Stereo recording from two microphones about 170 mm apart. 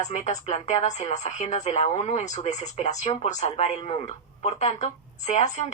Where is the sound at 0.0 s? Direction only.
45° left (ahead or behind).